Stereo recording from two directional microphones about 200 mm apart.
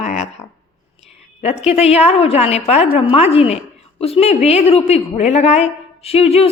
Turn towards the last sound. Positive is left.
turn(degrees=30)  # may be behind; listen again after turning